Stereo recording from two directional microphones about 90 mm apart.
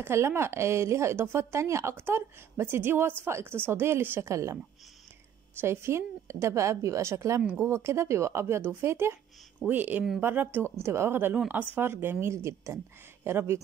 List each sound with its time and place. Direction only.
0.0 s a woman's voice: 30° right (ahead or behind)
5.6 s a woman's voice: 30° right (ahead or behind)